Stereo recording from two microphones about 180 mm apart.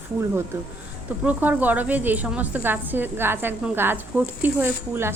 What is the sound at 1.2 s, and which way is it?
A woman's voice, 10° right (ahead or behind).